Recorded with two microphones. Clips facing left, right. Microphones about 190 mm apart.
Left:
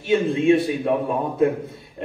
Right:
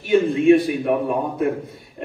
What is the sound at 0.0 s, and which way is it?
A man's voice, 25° left (ahead or behind).